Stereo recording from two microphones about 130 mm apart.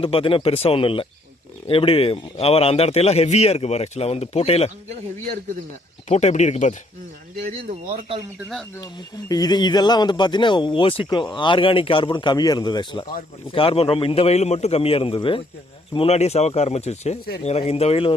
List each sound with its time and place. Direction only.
0.0 s speech: 45° left (ahead or behind)
6.1 s speech: 65° left (ahead or behind)
9.3 s speech: 30° left (ahead or behind); by 18.1 s 50° left (ahead or behind)